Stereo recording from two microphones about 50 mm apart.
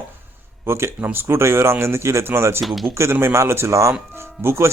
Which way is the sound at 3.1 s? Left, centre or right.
Right.